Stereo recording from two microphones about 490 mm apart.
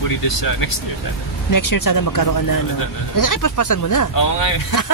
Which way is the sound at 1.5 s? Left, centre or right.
Left.